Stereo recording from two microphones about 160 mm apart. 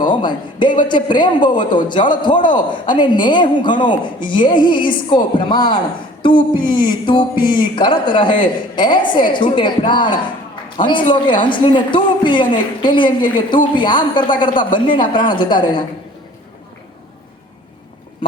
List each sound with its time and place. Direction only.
0.0 s a man's voice: 30° left (ahead or behind)